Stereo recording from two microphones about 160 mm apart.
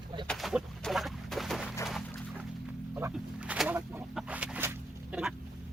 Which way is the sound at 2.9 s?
10° right (ahead or behind).